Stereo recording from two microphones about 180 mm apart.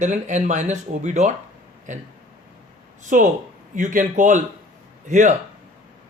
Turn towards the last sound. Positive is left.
turn(degrees=-45)  # may be behind; listen again after turning